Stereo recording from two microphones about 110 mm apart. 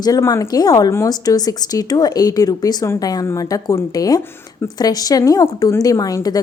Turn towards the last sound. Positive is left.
turn(degrees=35)  # may be behind; listen again after turning